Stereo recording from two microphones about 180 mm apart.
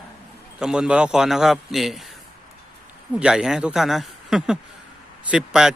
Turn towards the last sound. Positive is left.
turn(degrees=-5)  # may be behind; listen again after turning